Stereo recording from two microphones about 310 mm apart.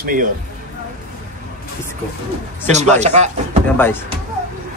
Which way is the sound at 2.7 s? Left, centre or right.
Right.